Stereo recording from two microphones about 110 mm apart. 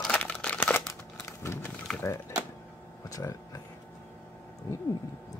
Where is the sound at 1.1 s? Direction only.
25° left (ahead or behind).